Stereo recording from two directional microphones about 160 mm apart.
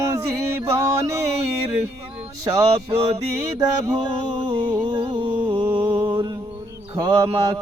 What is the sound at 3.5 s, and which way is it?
Music, 20° right (ahead or behind).